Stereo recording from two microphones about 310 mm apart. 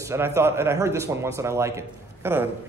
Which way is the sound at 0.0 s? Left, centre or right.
Centre.